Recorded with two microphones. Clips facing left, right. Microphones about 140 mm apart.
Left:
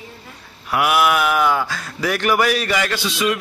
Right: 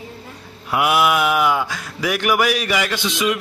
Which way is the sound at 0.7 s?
20° right (ahead or behind).